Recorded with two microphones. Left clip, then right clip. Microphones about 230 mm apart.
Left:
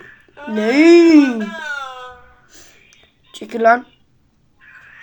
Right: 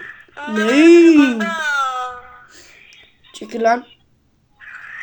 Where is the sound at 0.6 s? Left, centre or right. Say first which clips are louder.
Even; centre.